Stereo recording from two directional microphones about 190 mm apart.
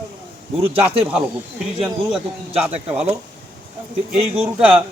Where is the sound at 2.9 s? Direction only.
5° right (ahead or behind).